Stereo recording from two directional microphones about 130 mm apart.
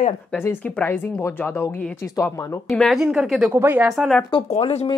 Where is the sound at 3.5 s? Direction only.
20° right (ahead or behind).